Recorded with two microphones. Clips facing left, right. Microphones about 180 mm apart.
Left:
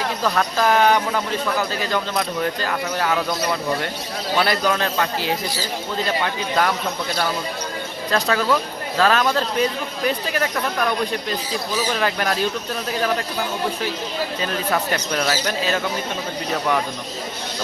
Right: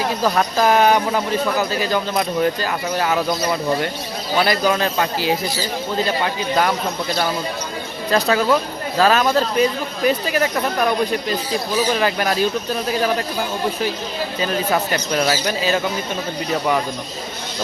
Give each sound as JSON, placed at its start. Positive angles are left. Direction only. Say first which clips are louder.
{"t": 0.2, "sound": "speech", "louder": "right 2 dB", "side_deg": -15}
{"t": 4.4, "sound": "speech", "louder": "right 3 dB", "side_deg": -5}
{"t": 8.1, "sound": "speech", "louder": "right 3 dB", "side_deg": -15}
{"t": 11.9, "sound": "speech", "louder": "right 3 dB", "side_deg": -5}
{"t": 15.1, "sound": "speech", "louder": "right 4 dB", "side_deg": -5}